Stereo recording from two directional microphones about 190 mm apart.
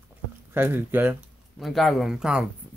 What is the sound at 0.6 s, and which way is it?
Speech, 10° right (ahead or behind).